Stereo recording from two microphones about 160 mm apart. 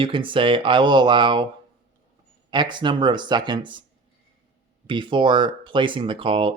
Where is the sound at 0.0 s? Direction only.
30° right (ahead or behind).